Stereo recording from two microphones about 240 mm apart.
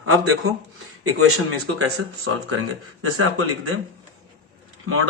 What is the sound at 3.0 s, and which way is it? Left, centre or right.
Speech, right.